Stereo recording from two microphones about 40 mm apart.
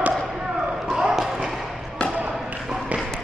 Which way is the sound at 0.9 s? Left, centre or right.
Centre.